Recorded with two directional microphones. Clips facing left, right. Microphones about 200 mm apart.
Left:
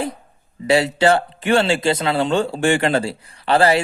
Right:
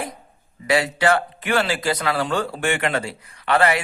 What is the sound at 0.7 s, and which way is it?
A man's voice, 30° left (ahead or behind).